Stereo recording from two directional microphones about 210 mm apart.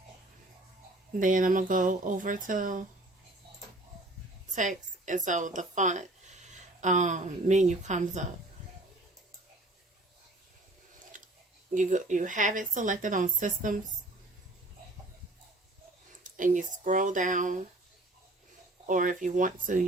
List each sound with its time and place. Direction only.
1.2 s a woman's voice: 40° right (ahead or behind)
4.5 s a woman's voice: 35° right (ahead or behind)
11.1 s a sound: 40° right (ahead or behind)
11.7 s a woman's voice: 35° right (ahead or behind)
16.2 s a woman's voice: 35° right (ahead or behind)
18.9 s a woman's voice: 40° right (ahead or behind)